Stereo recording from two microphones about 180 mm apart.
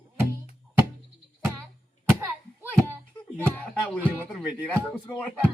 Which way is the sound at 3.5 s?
10° left (ahead or behind).